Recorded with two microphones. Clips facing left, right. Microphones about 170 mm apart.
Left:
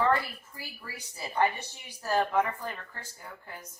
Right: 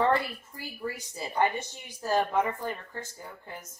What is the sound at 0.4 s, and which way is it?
A woman's voice, 25° right (ahead or behind).